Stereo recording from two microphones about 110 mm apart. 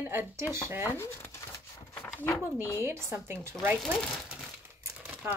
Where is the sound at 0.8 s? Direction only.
25° left (ahead or behind).